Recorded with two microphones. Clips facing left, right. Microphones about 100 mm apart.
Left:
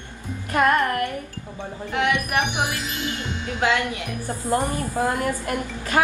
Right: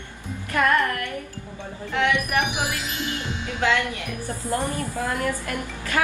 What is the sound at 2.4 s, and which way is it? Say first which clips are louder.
Music: left 1 dB; centre (ahead or behind).